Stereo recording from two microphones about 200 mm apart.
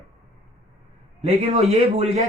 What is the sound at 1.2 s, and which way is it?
A woman's voice, 35° right (ahead or behind).